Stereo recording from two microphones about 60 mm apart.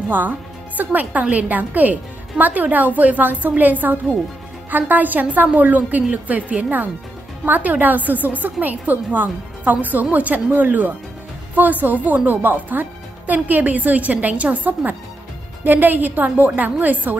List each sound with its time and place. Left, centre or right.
0.7 s a woman's voice: right